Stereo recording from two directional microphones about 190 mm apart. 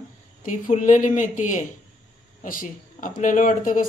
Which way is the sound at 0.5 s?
40° left (ahead or behind).